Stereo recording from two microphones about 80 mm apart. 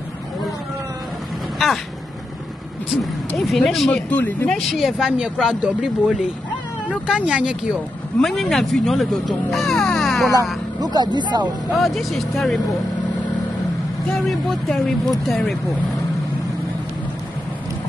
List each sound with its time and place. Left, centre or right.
1.6 s speech: centre
2.9 s speech: centre
3.9 s speech: left
4.5 s speech: centre
8.2 s speech: centre
10.8 s speech: right
11.7 s speech: centre
14.1 s speech: centre